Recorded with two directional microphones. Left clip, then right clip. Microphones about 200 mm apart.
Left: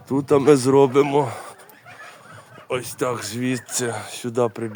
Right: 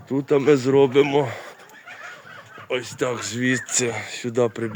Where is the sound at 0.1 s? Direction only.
20° left (ahead or behind).